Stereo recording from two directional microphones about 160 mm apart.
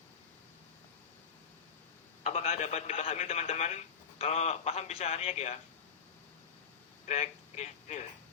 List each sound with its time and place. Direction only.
2.2 s speech: 45° left (ahead or behind)
7.1 s speech: 40° left (ahead or behind)